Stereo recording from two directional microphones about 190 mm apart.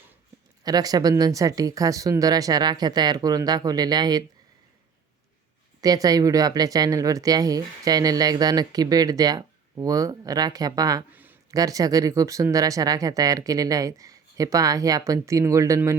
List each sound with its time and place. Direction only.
0.6 s speech: 20° right (ahead or behind)
5.8 s speech: 20° right (ahead or behind)